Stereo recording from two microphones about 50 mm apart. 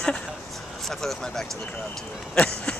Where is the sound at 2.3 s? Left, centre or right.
Centre.